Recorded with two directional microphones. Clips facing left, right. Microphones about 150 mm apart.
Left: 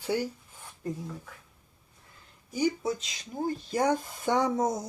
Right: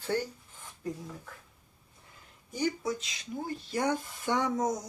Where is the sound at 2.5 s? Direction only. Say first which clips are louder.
Left 4 dB; 10° left (ahead or behind).